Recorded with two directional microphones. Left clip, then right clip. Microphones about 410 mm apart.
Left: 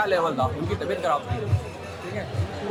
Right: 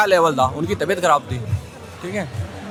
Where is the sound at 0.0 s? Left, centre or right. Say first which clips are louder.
Right 8 dB; right.